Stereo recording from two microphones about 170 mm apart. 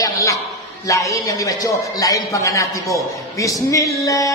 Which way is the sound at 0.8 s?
20° left (ahead or behind).